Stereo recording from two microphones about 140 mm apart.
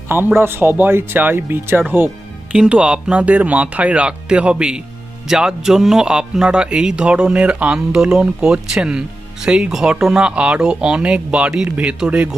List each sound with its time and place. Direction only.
0.1 s speech: 15° right (ahead or behind)